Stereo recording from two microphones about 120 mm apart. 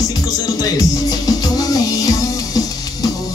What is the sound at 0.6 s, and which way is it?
Music, 30° left (ahead or behind).